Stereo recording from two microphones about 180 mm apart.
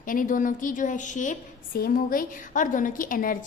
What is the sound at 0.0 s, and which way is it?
A woman's voice, 50° left (ahead or behind).